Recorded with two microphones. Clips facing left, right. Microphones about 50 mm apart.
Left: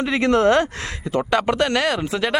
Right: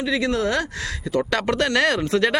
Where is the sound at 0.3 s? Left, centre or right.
Left.